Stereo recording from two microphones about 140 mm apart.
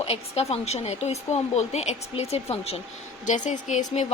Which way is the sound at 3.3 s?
60° left (ahead or behind).